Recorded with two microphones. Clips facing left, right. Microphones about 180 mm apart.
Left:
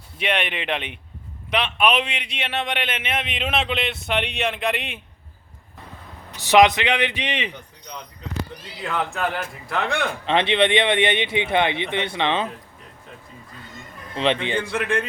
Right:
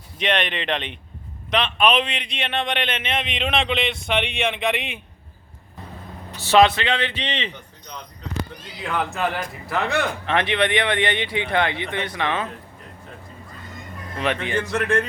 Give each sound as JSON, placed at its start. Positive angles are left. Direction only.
{"t": 0.2, "sound": "a man's voice", "side_deg": 10}
{"t": 6.3, "sound": "speech", "side_deg": 15}
{"t": 8.8, "sound": "a man's voice", "side_deg": 0}
{"t": 10.2, "sound": "speech", "side_deg": 25}
{"t": 14.3, "sound": "speech", "side_deg": 25}
{"t": 14.7, "sound": "a man's voice", "side_deg": 0}